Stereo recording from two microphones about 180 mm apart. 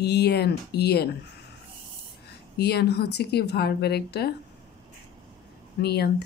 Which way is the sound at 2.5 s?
65° left (ahead or behind).